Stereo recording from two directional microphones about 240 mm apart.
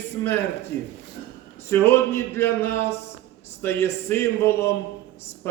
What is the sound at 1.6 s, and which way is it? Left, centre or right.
Speech, centre.